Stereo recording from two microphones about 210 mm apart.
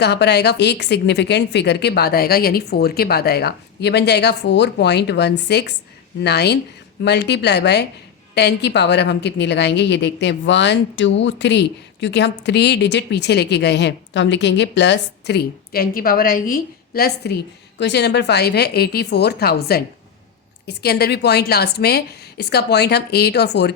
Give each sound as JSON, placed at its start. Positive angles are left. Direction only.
{"t": 0.0, "sound": "a woman's voice", "side_deg": 55}